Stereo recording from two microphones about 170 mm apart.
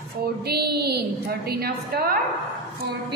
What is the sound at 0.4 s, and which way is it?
A woman's voice, 70° right (ahead or behind).